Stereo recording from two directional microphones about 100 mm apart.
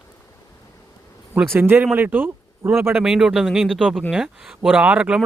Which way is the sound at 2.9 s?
5° right (ahead or behind).